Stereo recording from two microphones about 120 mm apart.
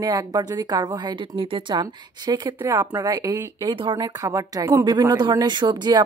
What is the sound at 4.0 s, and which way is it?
A woman's voice, 30° right (ahead or behind).